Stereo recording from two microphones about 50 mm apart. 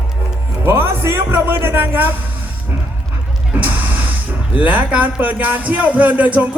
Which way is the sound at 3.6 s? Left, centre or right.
Right.